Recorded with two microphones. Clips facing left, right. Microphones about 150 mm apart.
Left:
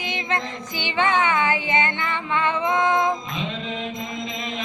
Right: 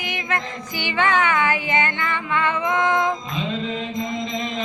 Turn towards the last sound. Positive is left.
turn(degrees=20)  # may be behind; listen again after turning